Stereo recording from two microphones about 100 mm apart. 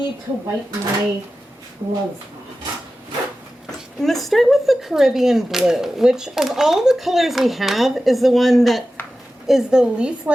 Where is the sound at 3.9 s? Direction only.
Centre (ahead or behind).